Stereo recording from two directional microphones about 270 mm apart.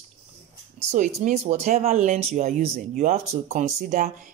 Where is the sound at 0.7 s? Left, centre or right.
Right.